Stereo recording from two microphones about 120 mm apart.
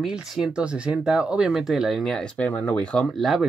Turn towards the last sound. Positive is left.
turn(degrees=0)  # may be behind; listen again after turning